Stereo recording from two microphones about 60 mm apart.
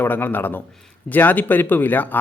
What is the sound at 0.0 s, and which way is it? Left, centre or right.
Speech, left.